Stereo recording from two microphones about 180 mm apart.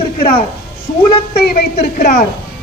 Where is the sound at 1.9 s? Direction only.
40° left (ahead or behind).